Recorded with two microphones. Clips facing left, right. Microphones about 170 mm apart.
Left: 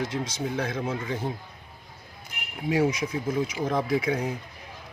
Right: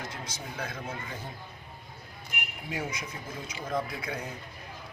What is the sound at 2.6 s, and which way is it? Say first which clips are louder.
Speech: left 13 dB; 80° left.